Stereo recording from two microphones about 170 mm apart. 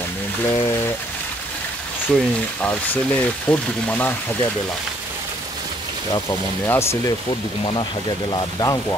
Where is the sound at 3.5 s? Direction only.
10° left (ahead or behind).